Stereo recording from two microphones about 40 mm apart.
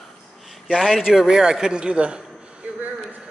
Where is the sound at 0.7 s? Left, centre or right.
Centre.